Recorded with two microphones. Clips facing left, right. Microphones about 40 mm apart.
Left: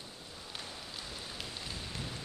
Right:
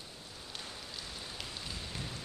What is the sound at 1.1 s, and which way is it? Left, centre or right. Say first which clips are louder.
Rain: left 1 dB; centre.